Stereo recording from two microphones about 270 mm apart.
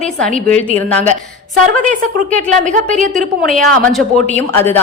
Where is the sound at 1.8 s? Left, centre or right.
Right.